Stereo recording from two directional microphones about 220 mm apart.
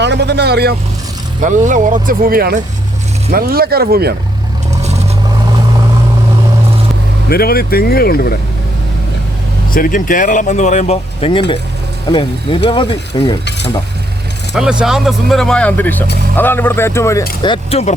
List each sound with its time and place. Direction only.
0.0 s speech: 50° right (ahead or behind)
1.4 s speech: 35° right (ahead or behind)
4.7 s vehicle: 30° right (ahead or behind)
7.3 s speech: 45° left (ahead or behind)
9.6 s speech: 40° left (ahead or behind); by 13.3 s 20° left (ahead or behind)
14.5 s speech: 5° right (ahead or behind); by 17.2 s 10° left (ahead or behind)
17.4 s speech: 25° left (ahead or behind)